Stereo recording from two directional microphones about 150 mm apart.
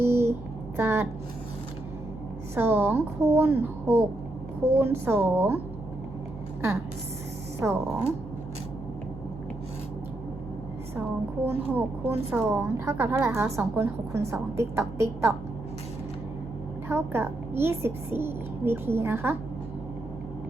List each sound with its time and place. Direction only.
0.0 s a sound: 15° right (ahead or behind)
0.8 s a woman's voice: 15° right (ahead or behind)
2.6 s a woman's voice: 15° right (ahead or behind)
7.6 s a woman's voice: 10° right (ahead or behind)
11.4 s a woman's voice: 15° right (ahead or behind)
16.9 s a woman's voice: 15° right (ahead or behind)